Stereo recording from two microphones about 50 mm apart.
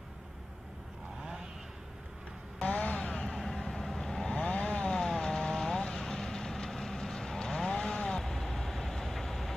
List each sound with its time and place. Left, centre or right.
2.6 s a sound: left
3.0 s vehicle: centre
4.3 s vehicle: left; by 9.6 s centre